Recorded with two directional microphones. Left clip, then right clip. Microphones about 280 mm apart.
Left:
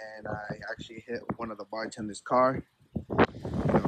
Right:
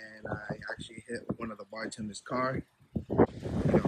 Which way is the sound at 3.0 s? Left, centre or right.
Right.